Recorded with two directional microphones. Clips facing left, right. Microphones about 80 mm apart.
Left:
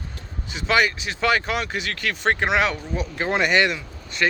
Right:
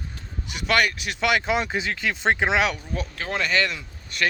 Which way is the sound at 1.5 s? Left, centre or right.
Right.